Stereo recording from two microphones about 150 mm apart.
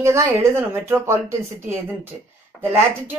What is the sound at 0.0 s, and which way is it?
Speech, 20° right (ahead or behind).